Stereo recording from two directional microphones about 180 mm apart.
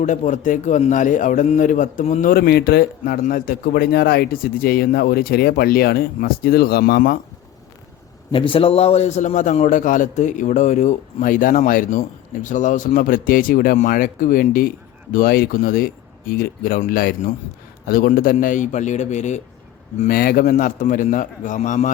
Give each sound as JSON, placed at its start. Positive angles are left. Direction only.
{"t": 0.0, "sound": "a man's voice", "side_deg": 45}
{"t": 8.3, "sound": "a man's voice", "side_deg": 30}
{"t": 20.0, "sound": "a man's voice", "side_deg": 55}